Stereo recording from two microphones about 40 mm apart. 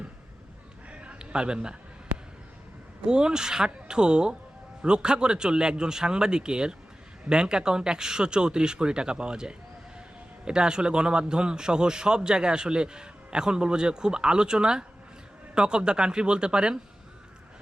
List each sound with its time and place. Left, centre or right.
1.2 s a man's voice: right
3.1 s a man's voice: right